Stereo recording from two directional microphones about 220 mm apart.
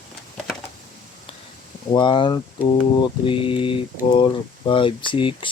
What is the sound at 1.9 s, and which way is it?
Speech, 20° left (ahead or behind).